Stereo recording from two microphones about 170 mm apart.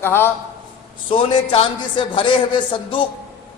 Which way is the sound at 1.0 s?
30° left (ahead or behind).